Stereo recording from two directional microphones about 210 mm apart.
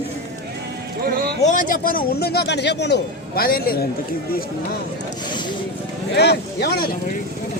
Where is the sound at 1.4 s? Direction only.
35° left (ahead or behind).